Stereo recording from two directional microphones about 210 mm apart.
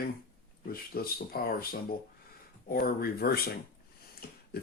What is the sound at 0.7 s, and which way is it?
Speech, 45° left (ahead or behind).